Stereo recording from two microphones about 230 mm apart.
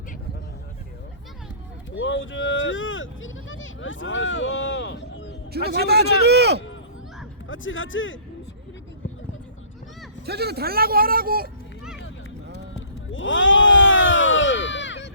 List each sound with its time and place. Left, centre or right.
2.0 s speech: left
5.6 s a man's voice: right
7.4 s speech: left
10.2 s speech: right
13.1 s a sound: left